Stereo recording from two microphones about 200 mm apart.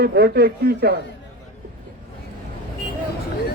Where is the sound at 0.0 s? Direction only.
55° right (ahead or behind).